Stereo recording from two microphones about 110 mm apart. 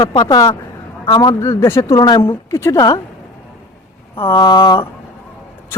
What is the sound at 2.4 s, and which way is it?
Speech, 25° left (ahead or behind).